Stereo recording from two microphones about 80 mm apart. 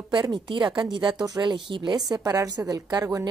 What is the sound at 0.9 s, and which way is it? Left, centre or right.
A woman's voice, right.